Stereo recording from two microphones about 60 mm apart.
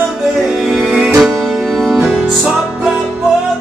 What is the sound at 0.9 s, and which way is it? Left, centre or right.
Music, centre.